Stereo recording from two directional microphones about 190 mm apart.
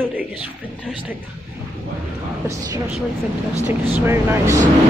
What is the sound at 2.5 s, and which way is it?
Speech, 15° right (ahead or behind).